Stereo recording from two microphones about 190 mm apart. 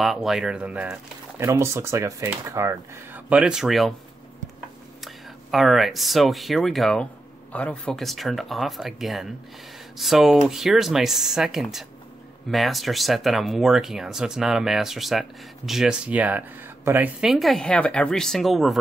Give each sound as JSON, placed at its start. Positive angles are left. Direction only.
{"t": 0.0, "sound": "speech", "side_deg": 0}
{"t": 5.0, "sound": "speech", "side_deg": 0}